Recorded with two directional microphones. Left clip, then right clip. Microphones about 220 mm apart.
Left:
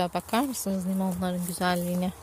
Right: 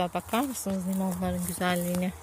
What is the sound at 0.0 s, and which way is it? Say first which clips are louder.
Speech: left 2 dB; 15° left (ahead or behind).